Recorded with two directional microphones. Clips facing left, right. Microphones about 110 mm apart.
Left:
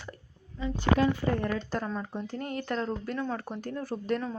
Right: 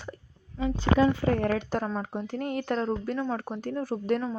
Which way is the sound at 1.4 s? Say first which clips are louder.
Right 4 dB; 65° right (ahead or behind).